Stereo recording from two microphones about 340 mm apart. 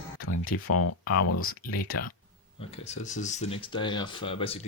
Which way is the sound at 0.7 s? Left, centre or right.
Left.